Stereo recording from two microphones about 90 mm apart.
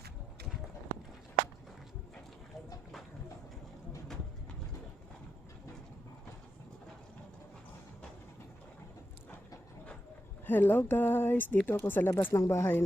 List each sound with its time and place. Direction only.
10.4 s speech: 20° left (ahead or behind)